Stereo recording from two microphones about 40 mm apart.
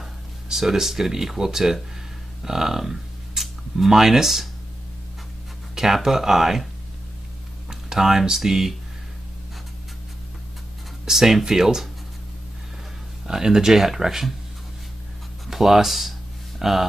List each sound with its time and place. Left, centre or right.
0.0 s speech: centre
5.8 s speech: centre
7.9 s speech: centre
11.1 s speech: centre
13.3 s speech: centre
15.4 s a sound: centre